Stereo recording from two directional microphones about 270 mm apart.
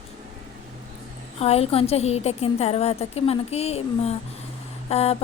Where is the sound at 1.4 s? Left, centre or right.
Left.